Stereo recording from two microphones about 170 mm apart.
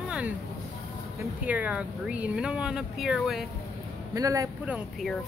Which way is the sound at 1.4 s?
10° right (ahead or behind).